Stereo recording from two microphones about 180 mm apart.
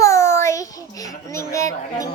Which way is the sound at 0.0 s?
15° left (ahead or behind).